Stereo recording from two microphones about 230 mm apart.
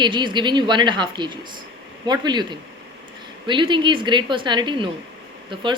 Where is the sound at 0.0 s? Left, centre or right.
Centre.